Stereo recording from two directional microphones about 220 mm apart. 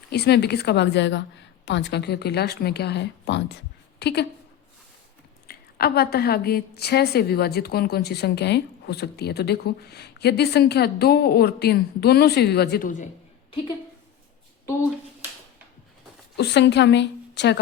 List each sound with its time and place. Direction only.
0.1 s a woman's voice: 45° left (ahead or behind)
5.5 s a woman's voice: 45° left (ahead or behind)
16.4 s a woman's voice: 50° left (ahead or behind)